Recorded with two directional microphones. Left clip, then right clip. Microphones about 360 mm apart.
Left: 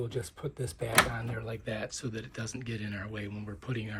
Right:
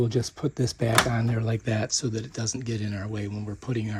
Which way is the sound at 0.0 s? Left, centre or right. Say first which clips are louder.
Right 9 dB; right.